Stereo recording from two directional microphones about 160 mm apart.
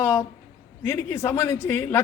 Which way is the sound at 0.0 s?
15° left (ahead or behind).